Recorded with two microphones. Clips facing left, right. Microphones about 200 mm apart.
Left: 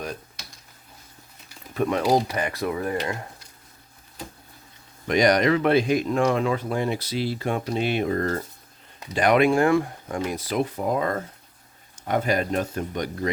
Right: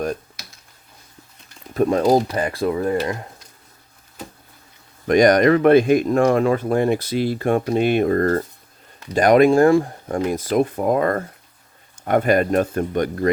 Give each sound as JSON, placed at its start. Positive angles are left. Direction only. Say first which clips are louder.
{"t": 1.7, "sound": "speech", "louder": "right 5 dB", "side_deg": -40}
{"t": 5.0, "sound": "speech", "louder": "right 6 dB", "side_deg": -50}